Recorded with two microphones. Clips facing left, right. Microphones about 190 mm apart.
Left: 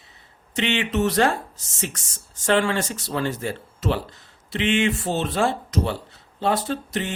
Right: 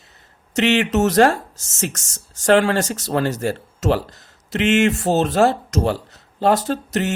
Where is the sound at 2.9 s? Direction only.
45° right (ahead or behind).